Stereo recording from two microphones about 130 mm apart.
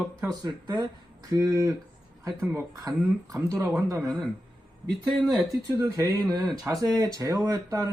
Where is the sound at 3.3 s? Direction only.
25° right (ahead or behind).